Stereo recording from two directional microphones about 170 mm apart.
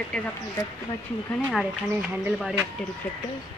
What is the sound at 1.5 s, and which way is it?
Speech, 5° right (ahead or behind).